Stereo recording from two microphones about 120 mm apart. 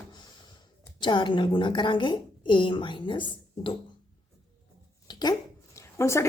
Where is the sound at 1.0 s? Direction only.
40° left (ahead or behind).